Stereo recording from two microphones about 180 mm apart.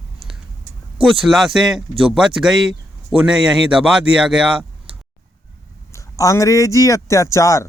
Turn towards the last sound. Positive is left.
turn(degrees=15)  # may be behind; listen again after turning